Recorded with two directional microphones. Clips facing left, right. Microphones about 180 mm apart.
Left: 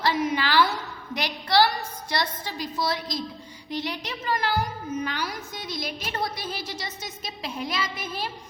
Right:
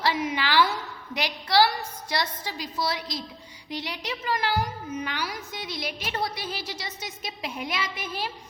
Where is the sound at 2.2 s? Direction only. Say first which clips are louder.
Left 2 dB; 55° left (ahead or behind).